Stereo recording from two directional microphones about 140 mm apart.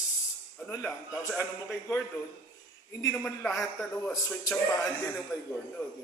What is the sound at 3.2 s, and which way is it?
Speech, centre (ahead or behind).